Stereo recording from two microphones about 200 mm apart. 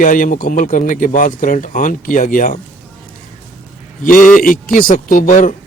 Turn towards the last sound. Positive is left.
turn(degrees=40)  # may be behind; listen again after turning